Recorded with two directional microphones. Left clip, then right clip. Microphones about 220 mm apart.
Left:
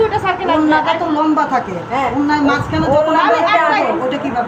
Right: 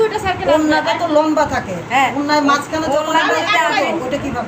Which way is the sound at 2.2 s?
40° right (ahead or behind).